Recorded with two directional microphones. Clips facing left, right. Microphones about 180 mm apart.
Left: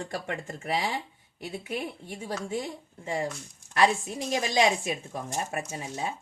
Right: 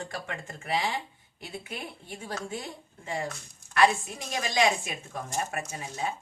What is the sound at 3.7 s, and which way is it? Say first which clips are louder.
A woman's voice: even; 35° left (ahead or behind).